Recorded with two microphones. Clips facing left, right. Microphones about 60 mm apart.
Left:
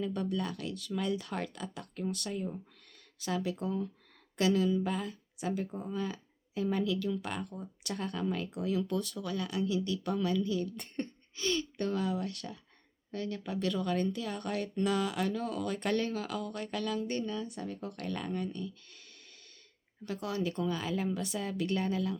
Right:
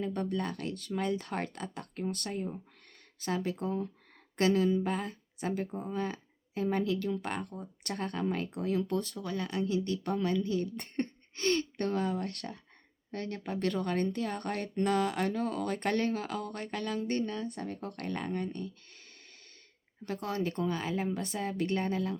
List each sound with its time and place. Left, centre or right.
0.0 s speech: right